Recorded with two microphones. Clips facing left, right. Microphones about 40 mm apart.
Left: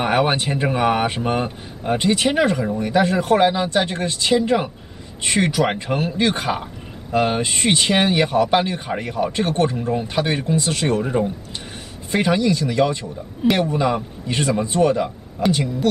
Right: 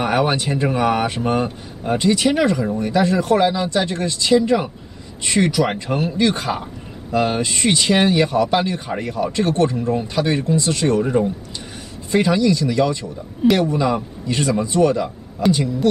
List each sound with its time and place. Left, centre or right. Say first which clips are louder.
0.0 s speech: even; left
2.0 s speech: right 1 dB; left
11.0 s a man's voice: right 3 dB; centre
12.1 s speech: right 2 dB; left